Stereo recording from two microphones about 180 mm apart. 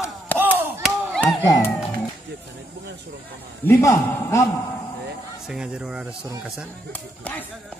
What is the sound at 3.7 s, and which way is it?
Speech, 15° left (ahead or behind).